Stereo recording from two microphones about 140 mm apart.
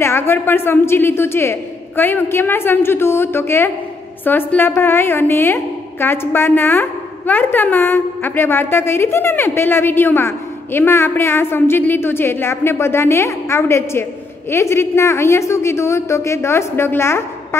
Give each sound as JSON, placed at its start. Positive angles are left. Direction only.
{"t": 0.0, "sound": "a woman's voice", "side_deg": 15}